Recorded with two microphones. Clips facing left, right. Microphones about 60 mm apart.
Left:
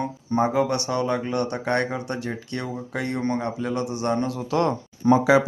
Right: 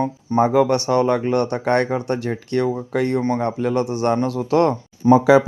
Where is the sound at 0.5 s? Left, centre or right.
Right.